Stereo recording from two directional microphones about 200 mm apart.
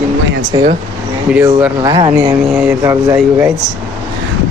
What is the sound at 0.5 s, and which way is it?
Speech, 20° right (ahead or behind).